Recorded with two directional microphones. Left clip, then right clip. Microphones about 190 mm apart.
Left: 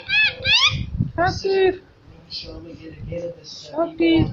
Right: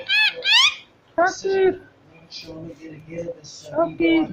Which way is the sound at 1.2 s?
10° right (ahead or behind).